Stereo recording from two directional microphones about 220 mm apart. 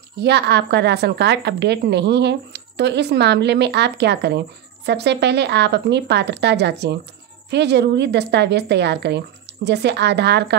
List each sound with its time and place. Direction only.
0.2 s a woman's voice: 50° right (ahead or behind)